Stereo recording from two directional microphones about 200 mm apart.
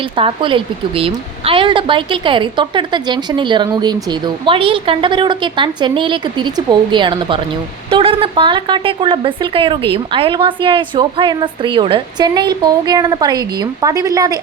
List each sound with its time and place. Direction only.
0.2 s a woman's voice: 25° right (ahead or behind)